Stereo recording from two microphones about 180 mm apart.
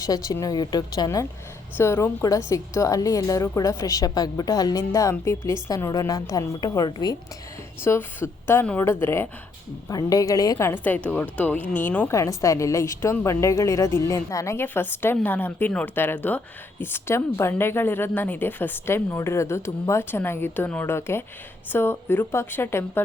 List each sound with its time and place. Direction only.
0.0 s a woman's voice: 20° left (ahead or behind)